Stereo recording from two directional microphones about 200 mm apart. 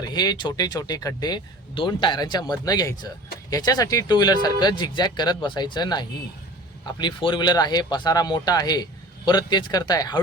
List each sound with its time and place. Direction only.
0.0 s speech: 20° left (ahead or behind)